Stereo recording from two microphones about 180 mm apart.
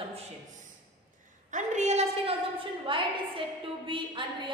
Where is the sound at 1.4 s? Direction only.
40° right (ahead or behind).